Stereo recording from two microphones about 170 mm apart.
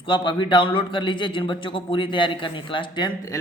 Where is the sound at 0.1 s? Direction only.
30° left (ahead or behind).